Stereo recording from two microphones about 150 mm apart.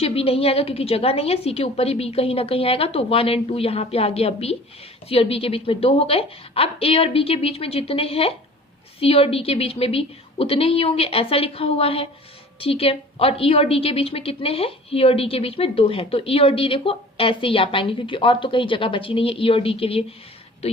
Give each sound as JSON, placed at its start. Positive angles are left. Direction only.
{"t": 0.0, "sound": "a woman's voice", "side_deg": 40}